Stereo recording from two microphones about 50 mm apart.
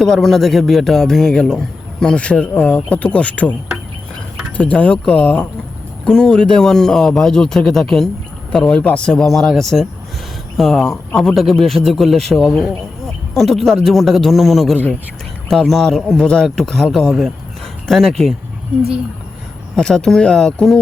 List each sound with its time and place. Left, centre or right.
0.0 s a man's voice: centre; by 3.5 s left
4.5 s speech: left
6.1 s a man's voice: centre
9.3 s a man's voice: centre
18.7 s speech: right
19.7 s a man's voice: centre